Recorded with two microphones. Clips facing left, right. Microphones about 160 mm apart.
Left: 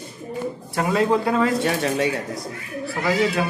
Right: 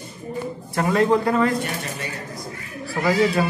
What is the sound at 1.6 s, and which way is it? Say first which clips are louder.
Speech: left 8 dB; 90° left.